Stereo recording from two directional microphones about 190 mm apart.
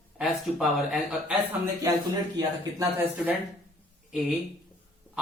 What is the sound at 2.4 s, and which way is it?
Speech, 15° right (ahead or behind).